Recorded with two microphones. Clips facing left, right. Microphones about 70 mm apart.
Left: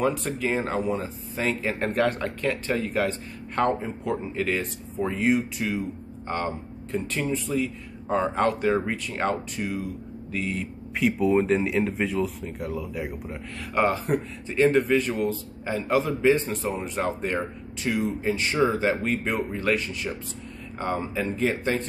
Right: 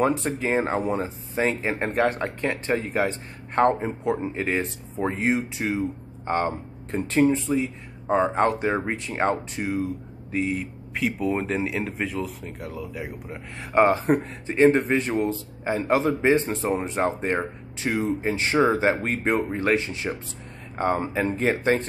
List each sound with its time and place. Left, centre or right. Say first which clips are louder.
0.0 s speech: right 2 dB; right
7.5 s speech: right 1 dB; right
11.0 s speech: left 3 dB; centre
13.7 s speech: right 4 dB; right